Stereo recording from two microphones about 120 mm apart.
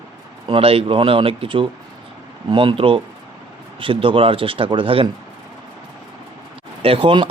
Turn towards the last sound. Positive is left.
turn(degrees=-45)  # may be behind; listen again after turning